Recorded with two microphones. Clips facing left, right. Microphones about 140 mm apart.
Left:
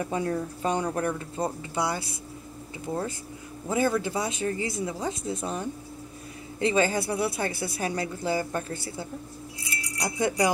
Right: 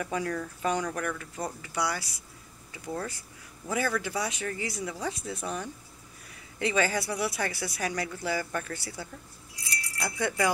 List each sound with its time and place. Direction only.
0.0 s a woman's voice: 25° left (ahead or behind)
9.8 s keys jangling: 20° left (ahead or behind)